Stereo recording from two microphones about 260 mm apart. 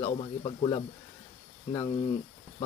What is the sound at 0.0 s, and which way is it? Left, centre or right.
Speech, left.